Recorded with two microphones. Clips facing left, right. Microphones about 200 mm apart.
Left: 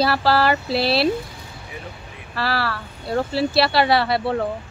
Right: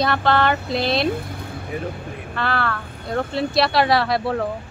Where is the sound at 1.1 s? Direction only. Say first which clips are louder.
Even; 55° right (ahead or behind).